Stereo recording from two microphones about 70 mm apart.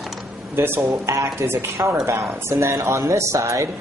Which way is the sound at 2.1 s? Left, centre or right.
Right.